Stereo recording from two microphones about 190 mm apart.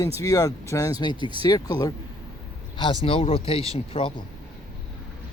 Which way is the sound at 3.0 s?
30° left (ahead or behind).